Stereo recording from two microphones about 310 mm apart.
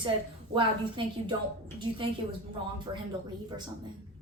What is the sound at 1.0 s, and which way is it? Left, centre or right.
Speech, centre.